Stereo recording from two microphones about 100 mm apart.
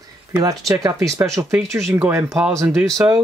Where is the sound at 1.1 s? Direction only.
30° right (ahead or behind).